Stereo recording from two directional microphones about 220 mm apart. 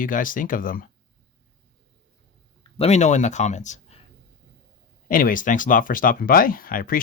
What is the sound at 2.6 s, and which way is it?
Speech, 25° left (ahead or behind).